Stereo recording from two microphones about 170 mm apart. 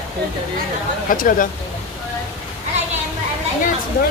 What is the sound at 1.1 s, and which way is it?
Speech, 55° left (ahead or behind).